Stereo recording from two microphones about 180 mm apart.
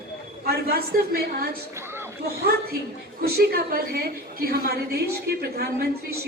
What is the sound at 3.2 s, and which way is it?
A woman's voice, 60° right (ahead or behind).